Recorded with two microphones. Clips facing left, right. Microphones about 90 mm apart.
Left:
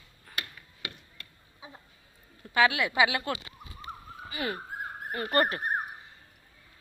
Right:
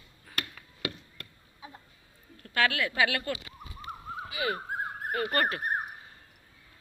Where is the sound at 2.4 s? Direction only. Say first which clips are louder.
Left 3 dB; 15° left (ahead or behind).